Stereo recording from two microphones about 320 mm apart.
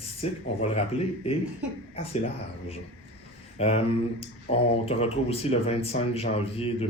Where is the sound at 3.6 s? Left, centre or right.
Centre.